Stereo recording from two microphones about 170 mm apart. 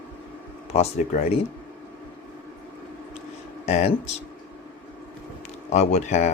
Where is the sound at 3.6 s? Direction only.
40° left (ahead or behind).